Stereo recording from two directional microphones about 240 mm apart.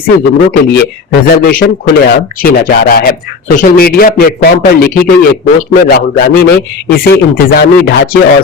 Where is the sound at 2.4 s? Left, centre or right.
Left.